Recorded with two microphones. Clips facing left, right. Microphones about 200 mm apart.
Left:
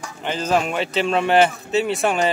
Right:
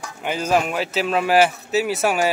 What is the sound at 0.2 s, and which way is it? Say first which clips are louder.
A man's voice: even; 10° right (ahead or behind).